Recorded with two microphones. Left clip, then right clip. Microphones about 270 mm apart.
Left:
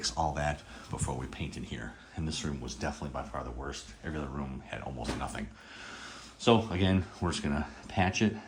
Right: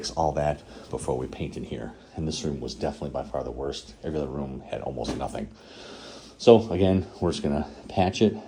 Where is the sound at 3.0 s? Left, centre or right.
Left.